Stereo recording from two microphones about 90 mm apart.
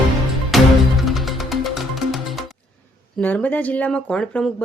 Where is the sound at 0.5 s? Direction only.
Centre (ahead or behind).